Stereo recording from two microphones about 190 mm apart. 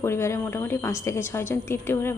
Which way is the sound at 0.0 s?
15° left (ahead or behind).